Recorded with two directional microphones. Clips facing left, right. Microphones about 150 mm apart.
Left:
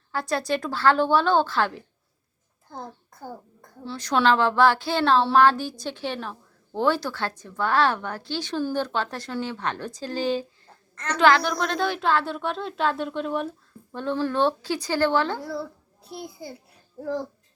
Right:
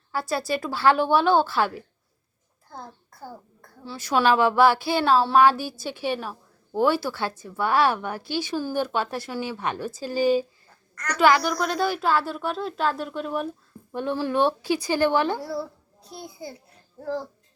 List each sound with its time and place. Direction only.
0.1 s speech: 5° right (ahead or behind)
2.6 s a sound: 20° left (ahead or behind)
3.8 s speech: 5° right (ahead or behind)
10.9 s a woman's voice: 25° left (ahead or behind)
11.2 s a woman's voice: 5° right (ahead or behind)
15.4 s a child's voice: centre (ahead or behind)